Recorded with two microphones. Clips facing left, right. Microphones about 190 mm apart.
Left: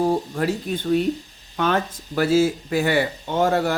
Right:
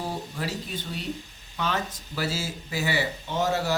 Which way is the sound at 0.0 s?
55° left (ahead or behind).